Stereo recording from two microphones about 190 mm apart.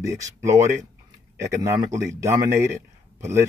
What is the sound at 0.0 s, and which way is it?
Speech, 15° right (ahead or behind).